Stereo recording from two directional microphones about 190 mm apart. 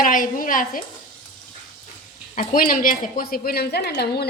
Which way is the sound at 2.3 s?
45° left (ahead or behind).